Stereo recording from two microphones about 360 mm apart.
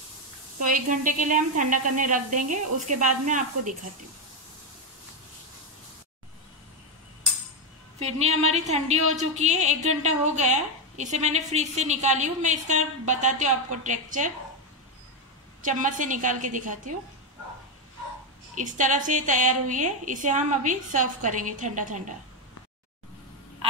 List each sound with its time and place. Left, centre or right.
0.6 s a woman's voice: right
8.0 s a woman's voice: centre
15.6 s a woman's voice: right
18.5 s a woman's voice: right